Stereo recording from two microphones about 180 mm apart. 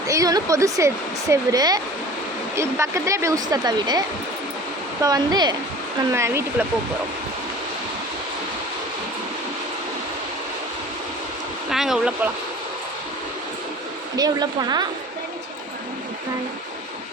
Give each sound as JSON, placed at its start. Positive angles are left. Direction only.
{"t": 0.1, "sound": "speech", "side_deg": -20}
{"t": 5.0, "sound": "speech", "side_deg": -20}
{"t": 11.7, "sound": "speech", "side_deg": 0}
{"t": 14.2, "sound": "speech", "side_deg": -20}